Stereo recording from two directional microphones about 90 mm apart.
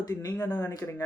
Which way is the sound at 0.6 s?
25° left (ahead or behind).